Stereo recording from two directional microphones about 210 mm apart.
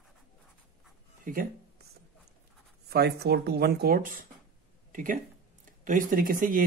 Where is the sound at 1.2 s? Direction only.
40° right (ahead or behind).